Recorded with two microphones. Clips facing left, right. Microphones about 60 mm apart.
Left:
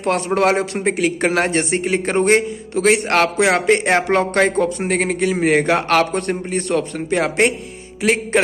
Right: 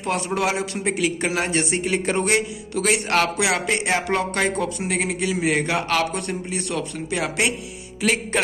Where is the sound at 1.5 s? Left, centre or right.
Left.